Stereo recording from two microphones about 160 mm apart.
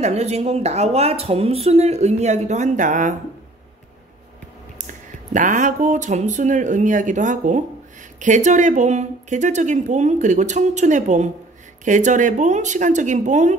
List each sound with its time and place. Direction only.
0.0 s speech: 45° right (ahead or behind)
5.3 s speech: 50° right (ahead or behind)